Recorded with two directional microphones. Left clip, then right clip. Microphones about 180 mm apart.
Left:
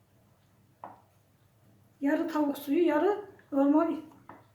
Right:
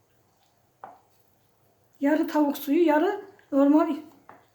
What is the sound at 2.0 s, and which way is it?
A woman's voice, 55° right (ahead or behind).